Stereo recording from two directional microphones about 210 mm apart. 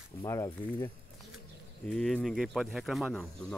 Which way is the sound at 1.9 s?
Centre (ahead or behind).